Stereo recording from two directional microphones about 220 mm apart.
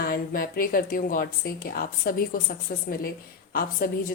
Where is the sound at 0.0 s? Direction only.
40° left (ahead or behind).